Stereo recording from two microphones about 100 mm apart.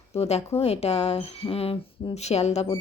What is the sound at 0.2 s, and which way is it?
Speech, 90° left.